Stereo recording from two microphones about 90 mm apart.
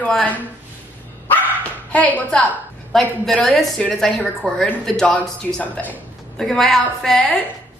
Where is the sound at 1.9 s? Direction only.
15° left (ahead or behind).